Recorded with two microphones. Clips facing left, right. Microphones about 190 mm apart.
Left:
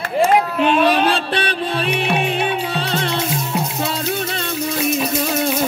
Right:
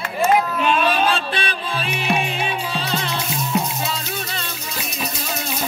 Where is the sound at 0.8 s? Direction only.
65° left (ahead or behind).